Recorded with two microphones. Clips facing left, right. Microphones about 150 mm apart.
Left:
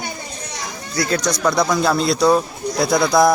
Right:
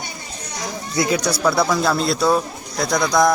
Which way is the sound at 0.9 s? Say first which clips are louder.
Even; 15° right (ahead or behind).